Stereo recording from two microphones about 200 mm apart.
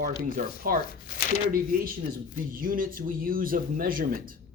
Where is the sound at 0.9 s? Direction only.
45° left (ahead or behind).